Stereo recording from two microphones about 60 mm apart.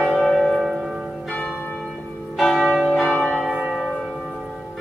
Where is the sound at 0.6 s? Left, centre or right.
Centre.